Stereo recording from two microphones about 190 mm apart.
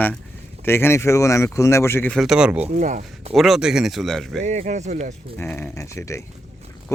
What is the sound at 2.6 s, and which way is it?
Speech, 40° right (ahead or behind).